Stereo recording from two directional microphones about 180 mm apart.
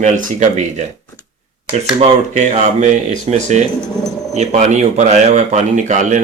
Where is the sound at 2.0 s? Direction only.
40° right (ahead or behind).